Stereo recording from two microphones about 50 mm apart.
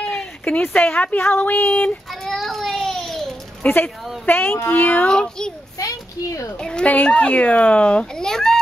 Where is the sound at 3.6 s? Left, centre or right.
Left.